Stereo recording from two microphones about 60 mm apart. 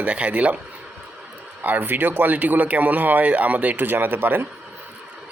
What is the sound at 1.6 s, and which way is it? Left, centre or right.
Speech, right.